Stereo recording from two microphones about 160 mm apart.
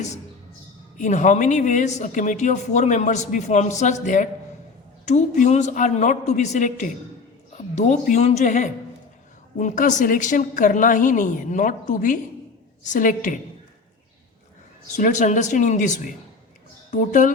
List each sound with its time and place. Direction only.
0.9 s speech: 50° left (ahead or behind)
14.9 s speech: 50° left (ahead or behind)
16.9 s speech: 55° left (ahead or behind)